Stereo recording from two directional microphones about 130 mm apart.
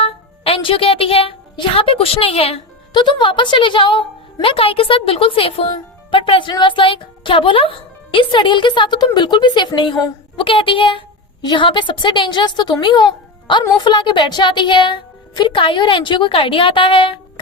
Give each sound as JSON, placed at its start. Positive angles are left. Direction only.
{"t": 0.0, "sound": "a woman's voice", "side_deg": 45}
{"t": 2.9, "sound": "a woman's voice", "side_deg": 35}